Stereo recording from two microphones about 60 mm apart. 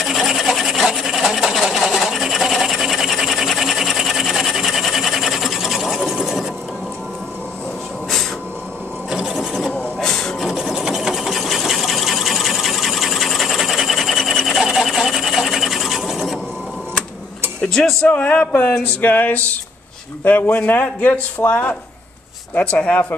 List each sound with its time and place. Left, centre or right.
0.0 s sewing machine: centre
9.1 s sewing machine: centre
9.9 s printer: centre
10.4 s sewing machine: centre
17.6 s music: centre
18.0 s speech: left
18.9 s a sound: left
20.5 s a sound: left
22.5 s speech: left